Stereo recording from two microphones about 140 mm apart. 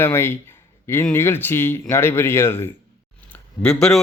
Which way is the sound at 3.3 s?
5° left (ahead or behind).